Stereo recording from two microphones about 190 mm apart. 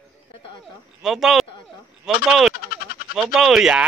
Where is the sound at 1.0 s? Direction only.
Centre (ahead or behind).